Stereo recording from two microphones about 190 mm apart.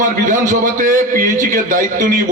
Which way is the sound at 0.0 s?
40° right (ahead or behind).